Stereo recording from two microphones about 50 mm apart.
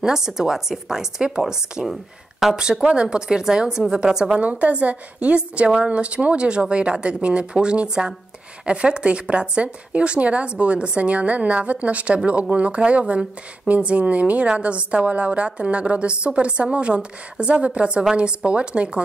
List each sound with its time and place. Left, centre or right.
0.0 s speech: centre
4.4 s a woman's voice: right